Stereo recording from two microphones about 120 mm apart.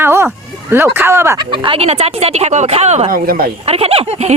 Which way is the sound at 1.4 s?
40° right (ahead or behind).